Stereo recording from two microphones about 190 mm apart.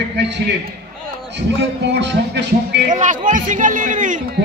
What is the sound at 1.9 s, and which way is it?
Speech, 65° right (ahead or behind).